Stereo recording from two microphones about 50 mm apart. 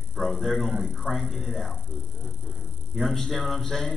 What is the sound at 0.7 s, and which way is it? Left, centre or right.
Speech, centre.